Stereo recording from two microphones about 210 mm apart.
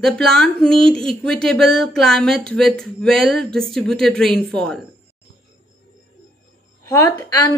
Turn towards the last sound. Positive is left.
turn(degrees=15)  # may be behind; listen again after turning